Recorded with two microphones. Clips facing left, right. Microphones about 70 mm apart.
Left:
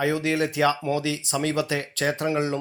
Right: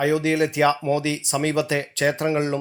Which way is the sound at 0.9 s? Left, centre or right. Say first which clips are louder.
Right 3 dB; right.